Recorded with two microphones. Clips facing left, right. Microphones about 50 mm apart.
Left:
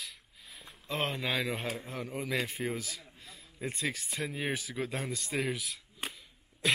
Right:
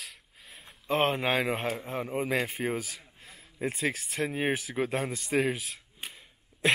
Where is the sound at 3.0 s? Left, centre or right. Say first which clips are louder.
Even; right.